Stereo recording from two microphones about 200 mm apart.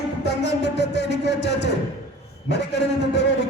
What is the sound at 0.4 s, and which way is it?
Music, 60° left (ahead or behind).